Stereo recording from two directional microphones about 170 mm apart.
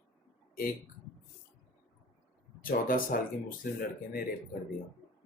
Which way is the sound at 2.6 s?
55° left (ahead or behind).